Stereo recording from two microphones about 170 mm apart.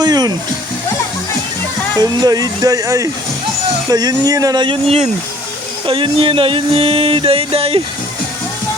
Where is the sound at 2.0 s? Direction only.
25° right (ahead or behind).